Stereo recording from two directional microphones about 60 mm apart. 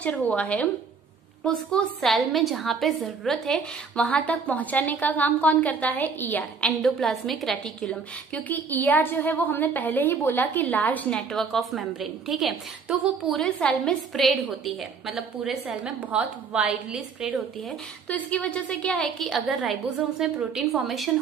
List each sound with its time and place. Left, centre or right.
0.0 s a woman's voice: left
2.0 s a woman's voice: centre
3.9 s a woman's voice: centre
6.8 s a woman's voice: centre
7.6 s a woman's voice: centre
8.6 s a woman's voice: left
11.1 s a woman's voice: centre
11.3 s a woman's voice: centre
13.6 s a woman's voice: centre
15.8 s a woman's voice: centre
18.0 s a woman's voice: left; by 19.4 s centre
20.2 s a woman's voice: centre